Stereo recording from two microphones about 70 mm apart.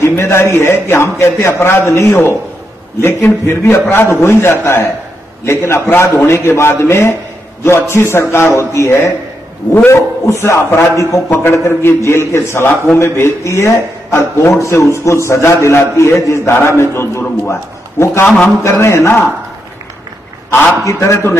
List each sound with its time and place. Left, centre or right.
0.0 s a man's voice: left
20.8 s a man's voice: left